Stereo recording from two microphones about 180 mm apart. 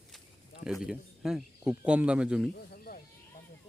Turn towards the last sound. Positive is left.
turn(degrees=55)  # may be behind; listen again after turning